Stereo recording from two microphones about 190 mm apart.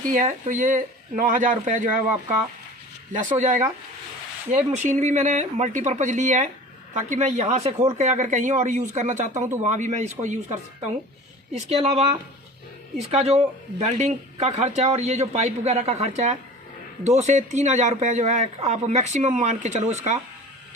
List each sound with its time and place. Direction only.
0.1 s speech: 40° right (ahead or behind)
3.1 s speech: 40° right (ahead or behind)